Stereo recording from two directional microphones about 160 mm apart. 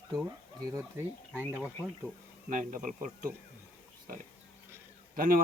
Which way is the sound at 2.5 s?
50° right (ahead or behind).